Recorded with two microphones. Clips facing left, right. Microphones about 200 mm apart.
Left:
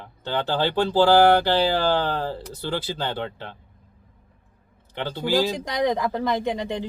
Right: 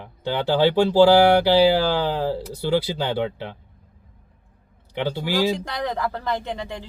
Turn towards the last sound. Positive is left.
turn(degrees=20)  # may be behind; listen again after turning